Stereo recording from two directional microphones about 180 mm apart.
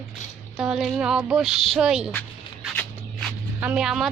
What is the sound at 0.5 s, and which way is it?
A woman's voice, 5° right (ahead or behind).